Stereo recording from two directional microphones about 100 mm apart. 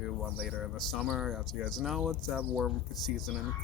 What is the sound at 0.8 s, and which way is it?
Speech, centre (ahead or behind).